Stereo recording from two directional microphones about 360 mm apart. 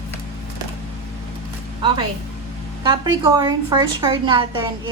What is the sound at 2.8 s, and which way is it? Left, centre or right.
A woman's voice, centre.